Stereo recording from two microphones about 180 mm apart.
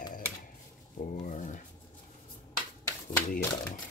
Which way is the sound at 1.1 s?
45° left (ahead or behind).